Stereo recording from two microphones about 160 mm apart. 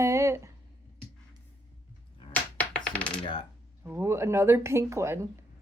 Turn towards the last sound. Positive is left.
turn(degrees=-15)  # may be behind; listen again after turning